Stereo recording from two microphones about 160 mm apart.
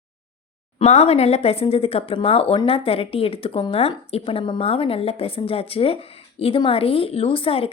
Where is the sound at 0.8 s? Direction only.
40° left (ahead or behind).